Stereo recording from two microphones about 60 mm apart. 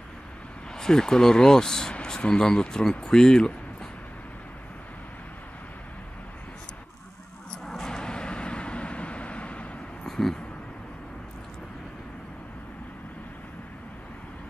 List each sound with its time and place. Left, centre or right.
0.7 s speech: centre
7.6 s vehicle: centre
10.0 s a sound: centre